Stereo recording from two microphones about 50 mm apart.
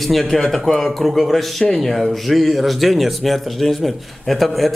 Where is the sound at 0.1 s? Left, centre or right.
Centre.